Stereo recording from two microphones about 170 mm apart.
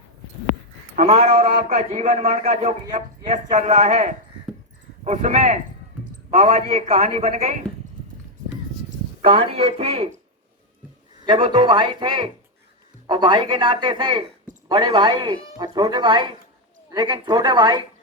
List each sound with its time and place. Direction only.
0.9 s a man's voice: 40° right (ahead or behind)
9.2 s a man's voice: 35° right (ahead or behind)
11.3 s a man's voice: 35° right (ahead or behind)